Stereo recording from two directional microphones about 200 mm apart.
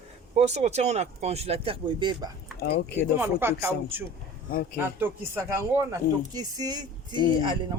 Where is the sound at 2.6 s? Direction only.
55° left (ahead or behind).